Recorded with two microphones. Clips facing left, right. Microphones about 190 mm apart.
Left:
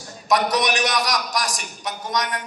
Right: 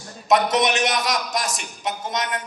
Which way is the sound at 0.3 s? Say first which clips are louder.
Right 2 dB; 25° right (ahead or behind).